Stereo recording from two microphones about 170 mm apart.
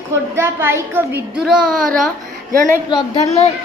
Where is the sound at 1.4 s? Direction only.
Centre (ahead or behind).